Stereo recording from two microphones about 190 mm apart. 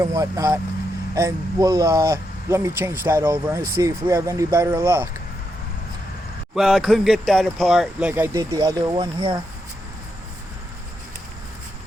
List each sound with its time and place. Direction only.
0.0 s speech: 20° right (ahead or behind)
6.6 s speech: centre (ahead or behind); by 9.4 s 30° right (ahead or behind)